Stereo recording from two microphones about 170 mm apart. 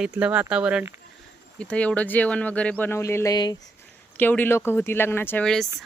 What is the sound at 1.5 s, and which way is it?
A woman's voice, 5° left (ahead or behind).